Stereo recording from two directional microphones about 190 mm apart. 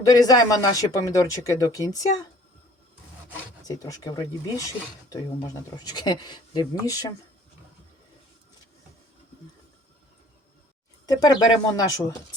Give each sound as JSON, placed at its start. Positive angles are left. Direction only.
{"t": 0.0, "sound": "speech", "side_deg": 20}
{"t": 3.6, "sound": "speech", "side_deg": 20}
{"t": 11.0, "sound": "speech", "side_deg": 20}